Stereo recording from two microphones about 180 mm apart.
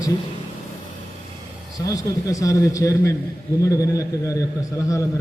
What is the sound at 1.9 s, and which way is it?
A man's voice, 20° left (ahead or behind).